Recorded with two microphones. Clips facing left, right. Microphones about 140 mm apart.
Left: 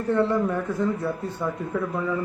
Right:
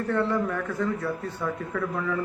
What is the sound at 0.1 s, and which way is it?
Speech, 20° left (ahead or behind).